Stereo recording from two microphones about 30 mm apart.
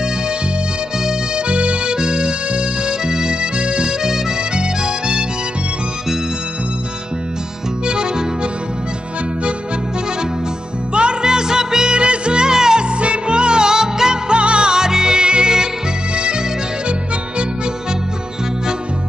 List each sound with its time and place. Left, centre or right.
1.3 s music: right
2.0 s music: right
4.0 s music: centre
7.8 s music: right
10.9 s music: right
11.2 s music: right
12.8 s music: right
14.3 s music: right